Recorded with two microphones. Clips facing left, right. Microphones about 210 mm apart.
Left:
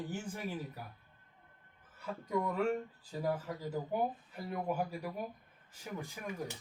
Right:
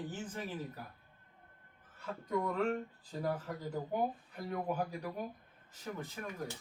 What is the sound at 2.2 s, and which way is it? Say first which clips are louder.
Speech: left 1 dB; 10° left (ahead or behind).